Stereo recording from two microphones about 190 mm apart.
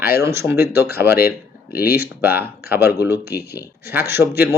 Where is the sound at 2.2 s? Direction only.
10° right (ahead or behind).